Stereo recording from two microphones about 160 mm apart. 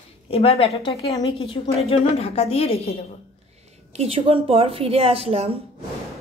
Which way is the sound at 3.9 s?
35° right (ahead or behind).